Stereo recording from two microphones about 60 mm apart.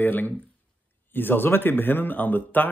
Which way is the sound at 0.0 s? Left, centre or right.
Left.